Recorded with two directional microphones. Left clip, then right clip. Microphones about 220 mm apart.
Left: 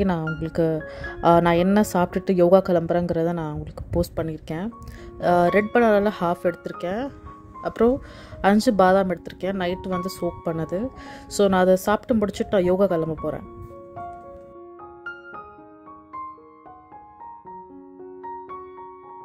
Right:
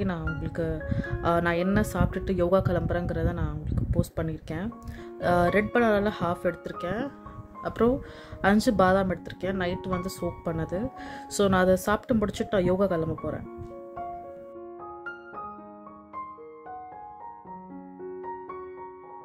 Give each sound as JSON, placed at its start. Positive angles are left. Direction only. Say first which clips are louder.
{"t": 0.0, "sound": "speech", "louder": "left 7 dB", "side_deg": 25}
{"t": 18.2, "sound": "music", "louder": "left 5 dB", "side_deg": 0}